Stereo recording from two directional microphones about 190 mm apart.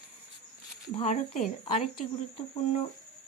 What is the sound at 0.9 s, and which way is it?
Speech, 35° left (ahead or behind).